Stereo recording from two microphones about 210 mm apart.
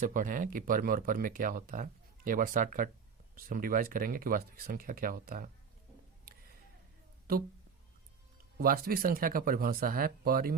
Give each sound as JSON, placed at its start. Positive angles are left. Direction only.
{"t": 0.0, "sound": "speech", "side_deg": -40}
{"t": 7.3, "sound": "speech", "side_deg": -45}
{"t": 8.5, "sound": "speech", "side_deg": -45}